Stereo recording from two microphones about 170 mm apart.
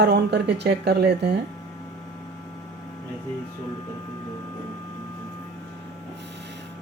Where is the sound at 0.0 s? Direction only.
80° right.